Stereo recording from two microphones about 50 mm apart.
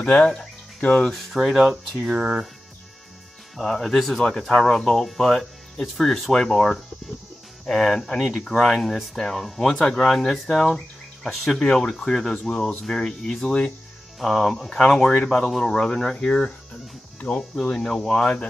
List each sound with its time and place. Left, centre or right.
0.0 s speech: centre
1.1 s speech: centre
3.5 s speech: centre
6.3 s speech: centre
7.7 s speech: centre; by 17.5 s left
17.6 s speech: centre